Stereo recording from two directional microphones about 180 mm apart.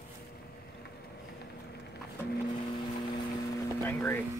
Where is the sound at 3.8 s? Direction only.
10° left (ahead or behind).